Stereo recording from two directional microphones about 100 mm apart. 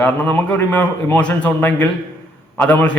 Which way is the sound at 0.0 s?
15° left (ahead or behind).